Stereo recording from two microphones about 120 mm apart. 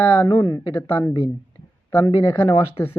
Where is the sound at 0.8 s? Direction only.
15° left (ahead or behind).